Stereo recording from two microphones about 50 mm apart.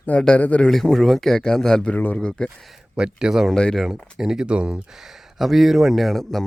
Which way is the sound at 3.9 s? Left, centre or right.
Centre.